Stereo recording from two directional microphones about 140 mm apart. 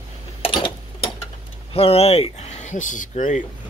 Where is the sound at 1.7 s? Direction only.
45° left (ahead or behind).